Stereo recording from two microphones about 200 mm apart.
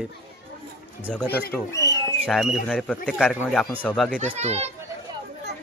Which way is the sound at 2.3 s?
Centre (ahead or behind).